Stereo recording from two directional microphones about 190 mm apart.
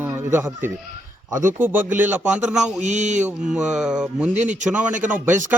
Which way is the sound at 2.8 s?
40° right (ahead or behind).